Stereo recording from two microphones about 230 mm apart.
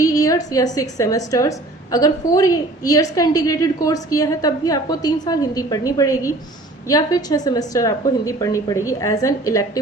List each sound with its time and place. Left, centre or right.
0.0 s a woman's voice: centre